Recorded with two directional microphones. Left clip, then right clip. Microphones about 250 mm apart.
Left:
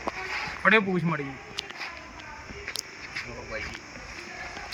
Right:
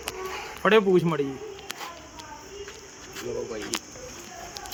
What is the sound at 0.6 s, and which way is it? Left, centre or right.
Speech, centre.